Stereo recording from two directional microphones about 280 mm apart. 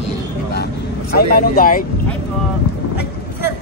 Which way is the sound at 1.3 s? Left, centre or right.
Left.